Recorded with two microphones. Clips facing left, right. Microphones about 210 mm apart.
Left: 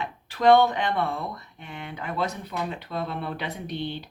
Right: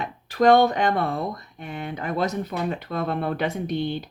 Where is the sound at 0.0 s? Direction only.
40° right (ahead or behind).